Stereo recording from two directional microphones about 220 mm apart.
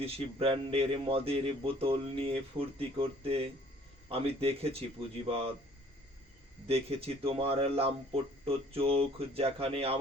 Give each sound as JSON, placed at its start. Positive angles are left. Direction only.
{"t": 0.0, "sound": "a man's voice", "side_deg": -25}
{"t": 6.7, "sound": "a man's voice", "side_deg": -25}